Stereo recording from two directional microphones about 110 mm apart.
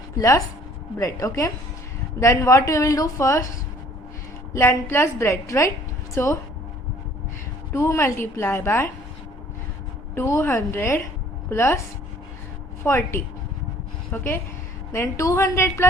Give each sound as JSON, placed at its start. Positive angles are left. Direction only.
{"t": 0.2, "sound": "a woman's voice", "side_deg": 30}
{"t": 4.5, "sound": "a woman's voice", "side_deg": 20}
{"t": 7.7, "sound": "a woman's voice", "side_deg": 25}
{"t": 10.2, "sound": "a woman's voice", "side_deg": 25}
{"t": 12.8, "sound": "a woman's voice", "side_deg": 20}
{"t": 14.9, "sound": "a woman's voice", "side_deg": 25}